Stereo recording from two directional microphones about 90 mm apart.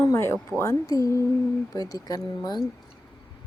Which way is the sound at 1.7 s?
45° left (ahead or behind).